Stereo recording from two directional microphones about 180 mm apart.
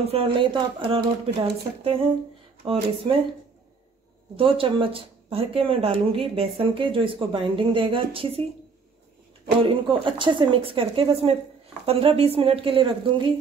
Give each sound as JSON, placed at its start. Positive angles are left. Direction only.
{"t": 0.0, "sound": "speech", "side_deg": -30}
{"t": 4.4, "sound": "speech", "side_deg": -30}
{"t": 9.7, "sound": "speech", "side_deg": -25}